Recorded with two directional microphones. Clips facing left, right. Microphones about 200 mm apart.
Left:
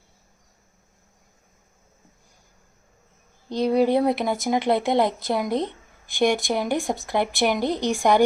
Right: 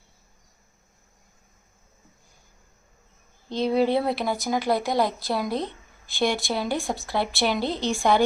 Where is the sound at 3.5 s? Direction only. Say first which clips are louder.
Left 2 dB; 15° left (ahead or behind).